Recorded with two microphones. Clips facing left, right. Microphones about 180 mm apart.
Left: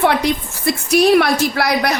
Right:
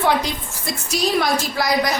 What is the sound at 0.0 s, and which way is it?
A woman's voice, 65° left (ahead or behind).